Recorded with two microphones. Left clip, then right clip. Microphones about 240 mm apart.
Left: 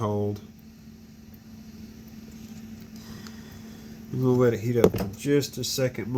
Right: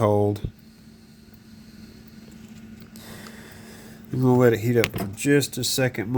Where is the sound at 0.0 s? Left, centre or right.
Right.